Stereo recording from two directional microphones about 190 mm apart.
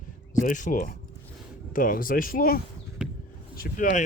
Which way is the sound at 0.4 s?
45° left (ahead or behind).